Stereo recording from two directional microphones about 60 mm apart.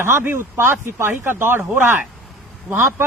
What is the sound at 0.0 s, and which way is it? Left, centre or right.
Speech, right.